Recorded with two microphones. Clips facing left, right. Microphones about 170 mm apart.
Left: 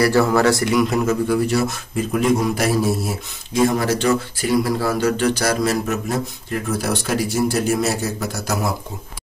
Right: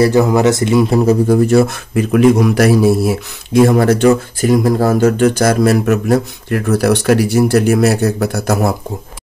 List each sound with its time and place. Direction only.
0.0 s speech: 20° right (ahead or behind); by 8.7 s 55° right (ahead or behind)